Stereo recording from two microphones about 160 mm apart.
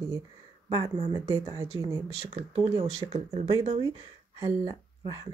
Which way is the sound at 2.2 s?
35° right (ahead or behind).